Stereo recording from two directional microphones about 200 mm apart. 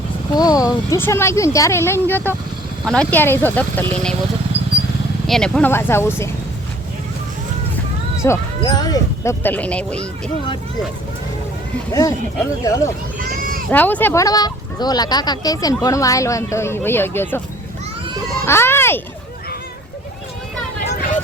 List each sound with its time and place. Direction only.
0.3 s speech: 20° left (ahead or behind)
5.2 s speech: centre (ahead or behind)
8.2 s speech: 15° left (ahead or behind)
11.9 s speech: 15° left (ahead or behind)
13.3 s a sound: 45° right (ahead or behind)
13.7 s speech: 10° left (ahead or behind)
18.4 s speech: 10° left (ahead or behind)